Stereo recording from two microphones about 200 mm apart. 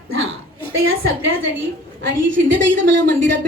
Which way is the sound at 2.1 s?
65° right (ahead or behind).